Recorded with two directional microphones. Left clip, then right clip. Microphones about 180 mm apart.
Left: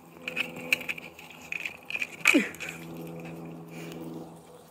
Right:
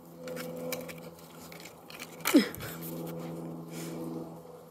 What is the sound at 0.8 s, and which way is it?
Crushing, 20° right (ahead or behind).